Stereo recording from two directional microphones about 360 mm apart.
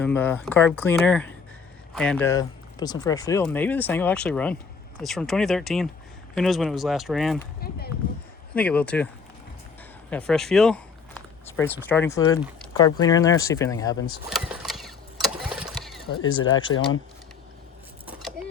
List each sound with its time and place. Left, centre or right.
0.0 s speech: centre
8.5 s speech: centre
10.1 s speech: centre
14.3 s a sound: centre
16.1 s speech: left